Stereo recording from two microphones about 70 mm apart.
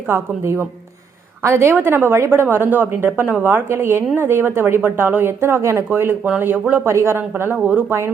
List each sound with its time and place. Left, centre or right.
0.1 s a woman's voice: right